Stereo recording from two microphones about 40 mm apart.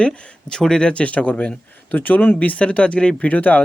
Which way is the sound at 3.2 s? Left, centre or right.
Left.